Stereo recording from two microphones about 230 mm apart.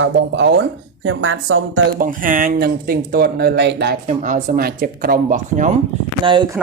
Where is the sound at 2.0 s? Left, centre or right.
Right.